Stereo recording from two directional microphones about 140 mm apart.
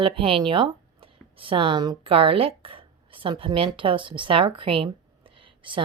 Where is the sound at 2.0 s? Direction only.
40° right (ahead or behind).